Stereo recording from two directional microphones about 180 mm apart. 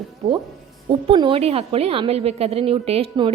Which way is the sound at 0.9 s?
25° right (ahead or behind).